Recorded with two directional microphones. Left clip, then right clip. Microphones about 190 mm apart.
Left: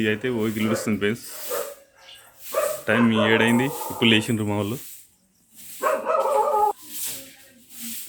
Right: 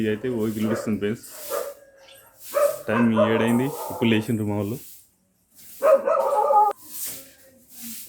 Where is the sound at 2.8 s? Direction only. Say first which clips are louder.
Left 1 dB; centre (ahead or behind).